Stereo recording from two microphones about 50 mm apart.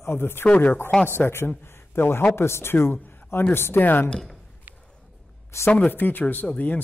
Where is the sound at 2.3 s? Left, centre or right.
Left.